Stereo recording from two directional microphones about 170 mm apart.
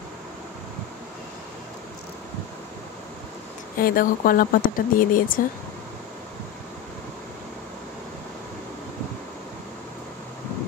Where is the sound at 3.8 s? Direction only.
60° left (ahead or behind).